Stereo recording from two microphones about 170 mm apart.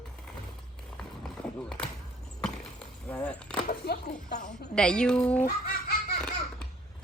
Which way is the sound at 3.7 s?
70° left (ahead or behind).